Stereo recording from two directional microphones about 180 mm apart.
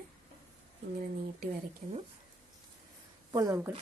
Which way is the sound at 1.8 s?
40° right (ahead or behind).